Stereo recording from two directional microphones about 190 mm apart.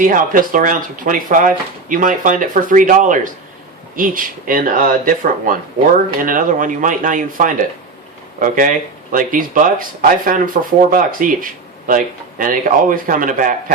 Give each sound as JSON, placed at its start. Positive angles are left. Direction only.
{"t": 0.0, "sound": "speech", "side_deg": -45}